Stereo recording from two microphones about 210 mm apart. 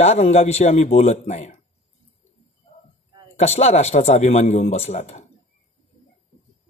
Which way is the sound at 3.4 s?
30° left (ahead or behind).